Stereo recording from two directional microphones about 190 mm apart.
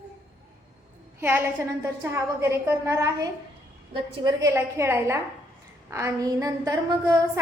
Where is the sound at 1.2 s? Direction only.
10° right (ahead or behind).